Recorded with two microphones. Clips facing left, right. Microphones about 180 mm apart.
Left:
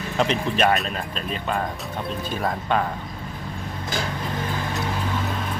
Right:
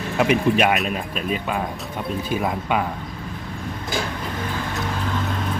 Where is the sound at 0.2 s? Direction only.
10° right (ahead or behind).